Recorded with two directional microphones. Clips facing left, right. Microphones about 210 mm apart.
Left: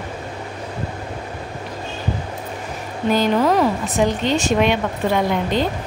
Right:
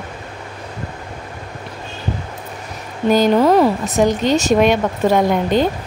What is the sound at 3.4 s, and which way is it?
Speech, 30° right (ahead or behind).